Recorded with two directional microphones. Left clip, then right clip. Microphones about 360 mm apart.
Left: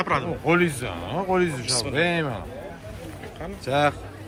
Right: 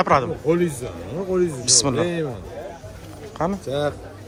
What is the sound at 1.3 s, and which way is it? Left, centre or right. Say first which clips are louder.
Speech: right 1 dB; centre.